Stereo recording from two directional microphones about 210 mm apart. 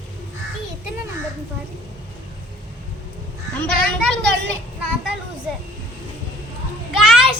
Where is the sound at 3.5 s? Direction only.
Centre (ahead or behind).